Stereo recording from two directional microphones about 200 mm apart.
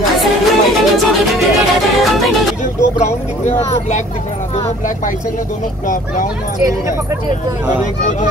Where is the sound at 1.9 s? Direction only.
Centre (ahead or behind).